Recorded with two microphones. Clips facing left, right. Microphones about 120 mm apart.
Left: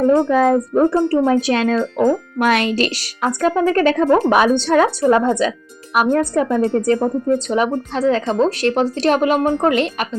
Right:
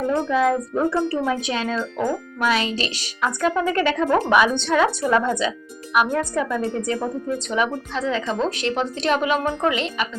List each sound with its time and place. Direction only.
0.3 s speech: 40° left (ahead or behind)
1.5 s speech: 55° left (ahead or behind); by 6.6 s 40° left (ahead or behind)
6.7 s speech: 50° left (ahead or behind)